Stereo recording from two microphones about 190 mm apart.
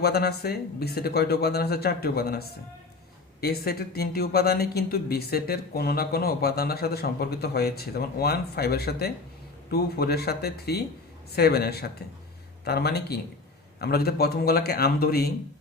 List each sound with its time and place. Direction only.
0.0 s speech: 55° left (ahead or behind)
3.4 s speech: 55° left (ahead or behind)